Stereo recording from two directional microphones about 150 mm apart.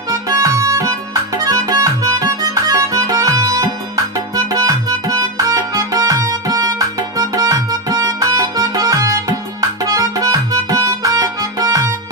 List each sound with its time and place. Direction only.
0.1 s music: 20° right (ahead or behind)